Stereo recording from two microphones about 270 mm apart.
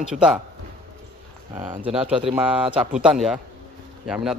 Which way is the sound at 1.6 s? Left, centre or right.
Centre.